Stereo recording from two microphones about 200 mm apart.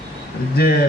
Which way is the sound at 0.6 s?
50° left (ahead or behind).